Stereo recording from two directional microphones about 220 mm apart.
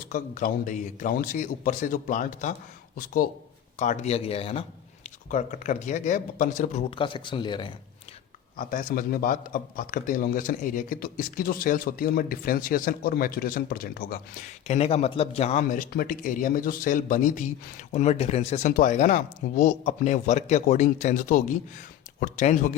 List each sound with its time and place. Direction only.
0.1 s a man's voice: 35° left (ahead or behind); by 7.7 s 20° left (ahead or behind)
8.5 s a man's voice: 40° left (ahead or behind)
14.7 s a man's voice: 30° left (ahead or behind)